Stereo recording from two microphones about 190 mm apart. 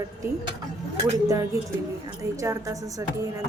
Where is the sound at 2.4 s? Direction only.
15° right (ahead or behind).